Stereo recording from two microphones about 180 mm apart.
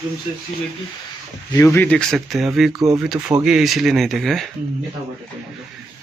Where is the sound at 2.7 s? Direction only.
20° right (ahead or behind).